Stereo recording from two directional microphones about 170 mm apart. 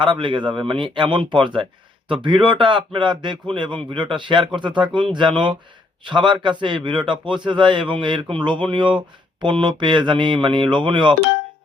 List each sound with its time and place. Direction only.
0.0 s a man's voice: 30° right (ahead or behind)